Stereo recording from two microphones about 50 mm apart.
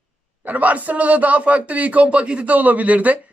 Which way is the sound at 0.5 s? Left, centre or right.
Right.